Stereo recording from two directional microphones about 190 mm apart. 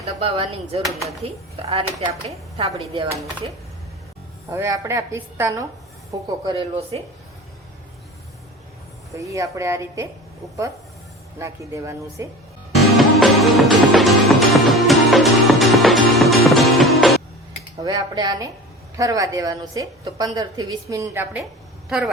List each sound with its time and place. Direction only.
0.0 s speech: 30° right (ahead or behind)
2.6 s speech: 30° right (ahead or behind)
4.5 s a woman's voice: 15° right (ahead or behind)
9.1 s a woman's voice: 15° right (ahead or behind)
11.3 s a woman's voice: 15° right (ahead or behind)
13.0 s music: centre (ahead or behind)
17.8 s a woman's voice: 20° right (ahead or behind); by 22.1 s 5° right (ahead or behind)